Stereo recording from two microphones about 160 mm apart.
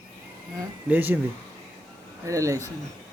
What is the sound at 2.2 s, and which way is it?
Speech, 20° right (ahead or behind).